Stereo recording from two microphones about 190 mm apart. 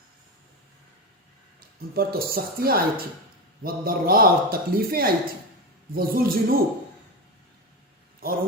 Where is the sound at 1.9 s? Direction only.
50° right (ahead or behind).